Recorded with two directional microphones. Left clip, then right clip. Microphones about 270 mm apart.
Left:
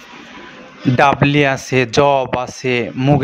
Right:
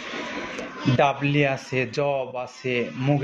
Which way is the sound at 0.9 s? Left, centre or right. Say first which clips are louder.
Left 9 dB; left.